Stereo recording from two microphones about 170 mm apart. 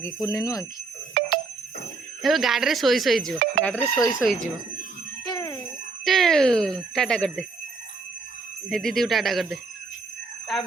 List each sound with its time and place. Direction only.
0.0 s speech: 15° left (ahead or behind)
1.2 s a sound: 70° right (ahead or behind)
2.2 s speech: centre (ahead or behind)
3.9 s speech: centre (ahead or behind)
5.2 s jingle bell: 25° left (ahead or behind)
6.1 s speech: centre (ahead or behind)
8.7 s speech: centre (ahead or behind)